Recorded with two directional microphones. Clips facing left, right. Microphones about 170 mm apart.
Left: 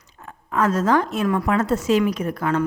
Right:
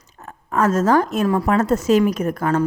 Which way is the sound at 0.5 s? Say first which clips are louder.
Right 3 dB; 45° right (ahead or behind).